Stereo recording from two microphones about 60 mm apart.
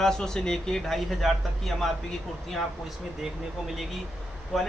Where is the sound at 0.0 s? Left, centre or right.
Centre.